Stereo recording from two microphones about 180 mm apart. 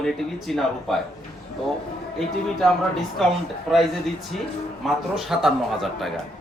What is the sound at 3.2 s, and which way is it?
Speech, centre (ahead or behind).